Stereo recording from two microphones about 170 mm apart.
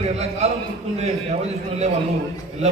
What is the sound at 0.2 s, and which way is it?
A man's voice, 40° right (ahead or behind).